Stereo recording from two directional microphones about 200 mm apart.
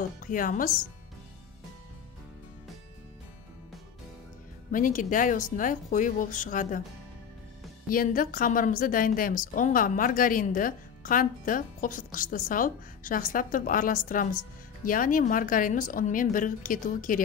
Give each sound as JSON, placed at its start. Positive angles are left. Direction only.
{"t": 0.2, "sound": "a woman's voice", "side_deg": 40}
{"t": 4.6, "sound": "speech", "side_deg": 40}
{"t": 7.9, "sound": "a woman's voice", "side_deg": 45}